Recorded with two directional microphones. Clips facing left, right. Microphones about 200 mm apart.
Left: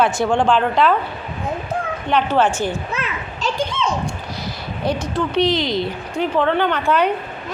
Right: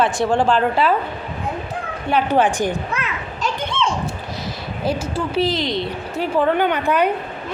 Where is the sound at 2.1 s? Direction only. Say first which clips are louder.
Even; 15° right (ahead or behind).